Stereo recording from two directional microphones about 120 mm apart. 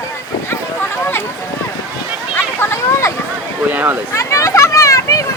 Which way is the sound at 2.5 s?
20° left (ahead or behind).